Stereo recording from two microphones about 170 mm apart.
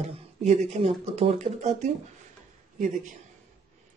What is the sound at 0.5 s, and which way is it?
Speech, 35° right (ahead or behind).